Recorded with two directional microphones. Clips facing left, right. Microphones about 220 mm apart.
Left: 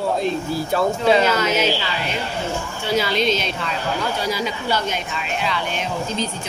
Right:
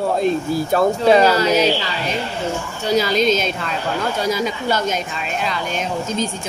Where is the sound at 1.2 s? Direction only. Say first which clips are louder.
Right 4 dB; 35° right (ahead or behind).